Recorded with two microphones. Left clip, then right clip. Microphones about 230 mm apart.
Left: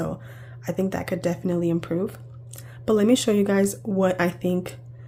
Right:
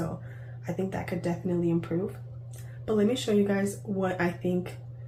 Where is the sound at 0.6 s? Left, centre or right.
Left.